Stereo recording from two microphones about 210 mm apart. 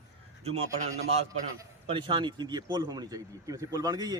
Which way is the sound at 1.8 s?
25° right (ahead or behind).